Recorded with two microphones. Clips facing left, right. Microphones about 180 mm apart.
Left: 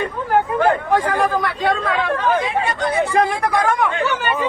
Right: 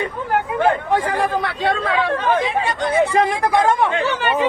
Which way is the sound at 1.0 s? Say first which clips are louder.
Left 1 dB; 25° right (ahead or behind).